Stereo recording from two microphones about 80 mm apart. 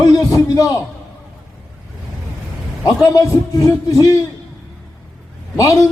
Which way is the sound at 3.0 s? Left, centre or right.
Left.